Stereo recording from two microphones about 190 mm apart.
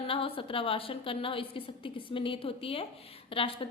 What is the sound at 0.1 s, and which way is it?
A woman's voice, 30° left (ahead or behind).